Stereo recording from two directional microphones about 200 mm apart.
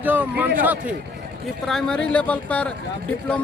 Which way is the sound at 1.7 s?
Centre (ahead or behind).